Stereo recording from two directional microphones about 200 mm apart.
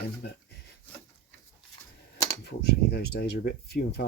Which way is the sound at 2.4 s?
55° left (ahead or behind).